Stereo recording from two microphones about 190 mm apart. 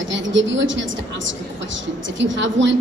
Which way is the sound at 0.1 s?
75° right (ahead or behind).